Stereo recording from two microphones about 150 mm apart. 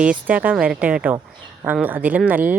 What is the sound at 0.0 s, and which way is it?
Speech, 10° right (ahead or behind).